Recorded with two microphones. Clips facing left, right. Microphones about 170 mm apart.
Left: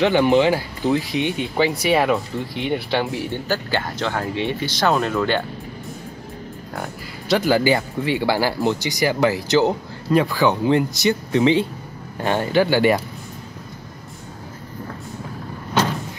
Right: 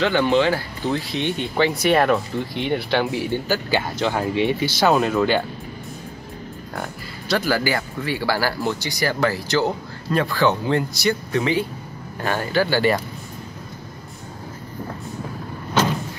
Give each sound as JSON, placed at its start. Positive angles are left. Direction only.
{"t": 0.0, "sound": "speech", "side_deg": 15}
{"t": 7.2, "sound": "speech", "side_deg": 20}